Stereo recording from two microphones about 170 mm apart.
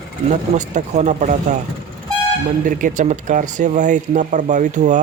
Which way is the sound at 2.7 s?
50° right (ahead or behind).